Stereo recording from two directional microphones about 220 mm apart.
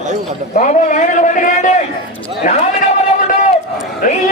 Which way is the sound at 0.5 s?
35° left (ahead or behind).